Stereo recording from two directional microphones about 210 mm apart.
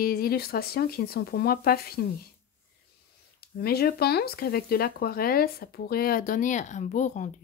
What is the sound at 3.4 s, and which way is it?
Speech, 50° left (ahead or behind).